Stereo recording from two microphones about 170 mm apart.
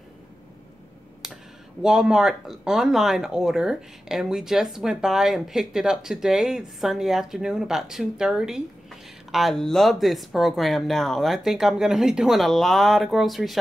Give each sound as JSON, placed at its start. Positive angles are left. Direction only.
{"t": 1.2, "sound": "speech", "side_deg": -5}